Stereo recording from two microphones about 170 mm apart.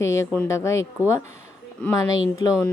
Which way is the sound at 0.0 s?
15° left (ahead or behind).